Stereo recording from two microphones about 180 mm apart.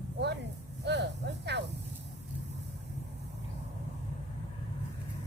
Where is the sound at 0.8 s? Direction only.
70° right (ahead or behind).